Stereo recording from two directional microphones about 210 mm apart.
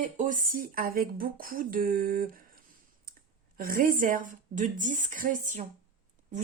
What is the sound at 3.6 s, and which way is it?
A woman's voice, 40° right (ahead or behind).